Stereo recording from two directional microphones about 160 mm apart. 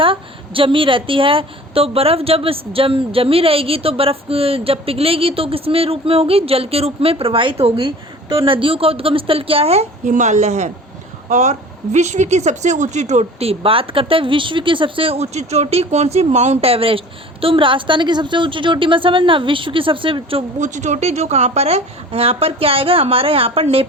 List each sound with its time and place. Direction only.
0.0 s a woman's voice: 35° right (ahead or behind)
10.1 s a woman's voice: 50° right (ahead or behind); by 20.4 s 35° right (ahead or behind)
20.6 s a woman's voice: 50° right (ahead or behind)